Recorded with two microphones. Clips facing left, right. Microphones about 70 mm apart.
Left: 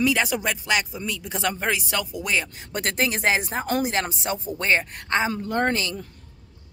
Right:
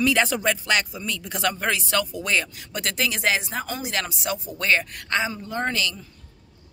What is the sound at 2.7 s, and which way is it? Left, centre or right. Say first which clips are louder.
A woman's voice: left 2 dB; left.